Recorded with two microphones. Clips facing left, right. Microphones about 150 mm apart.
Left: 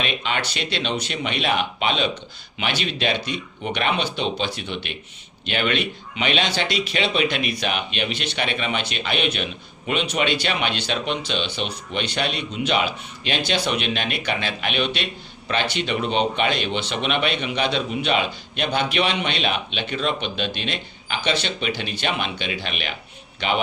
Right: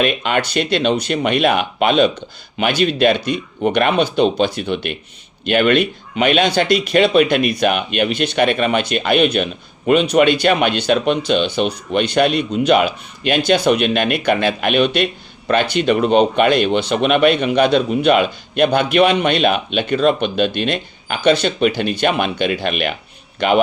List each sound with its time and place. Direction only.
0.0 s speech: 50° right (ahead or behind)